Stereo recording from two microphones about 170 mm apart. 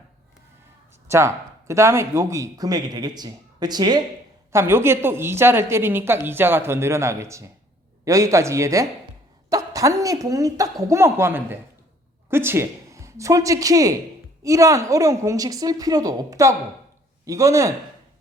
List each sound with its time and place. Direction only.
1.0 s a woman's voice: 15° right (ahead or behind)